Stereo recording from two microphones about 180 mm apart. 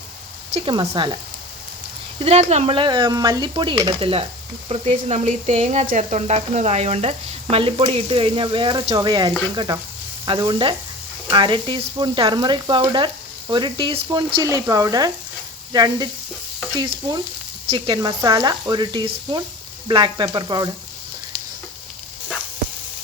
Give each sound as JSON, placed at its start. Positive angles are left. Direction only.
{"t": 0.5, "sound": "speech", "side_deg": -25}
{"t": 2.1, "sound": "speech", "side_deg": -35}